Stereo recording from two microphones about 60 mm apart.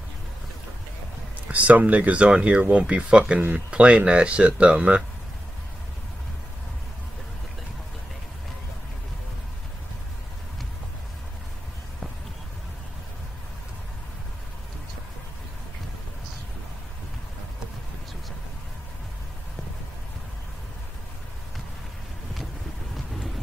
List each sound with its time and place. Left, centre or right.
1.5 s speech: right